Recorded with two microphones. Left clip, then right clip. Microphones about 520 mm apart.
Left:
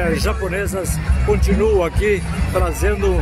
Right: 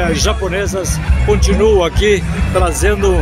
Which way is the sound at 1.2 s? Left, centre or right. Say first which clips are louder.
Right 5 dB; left.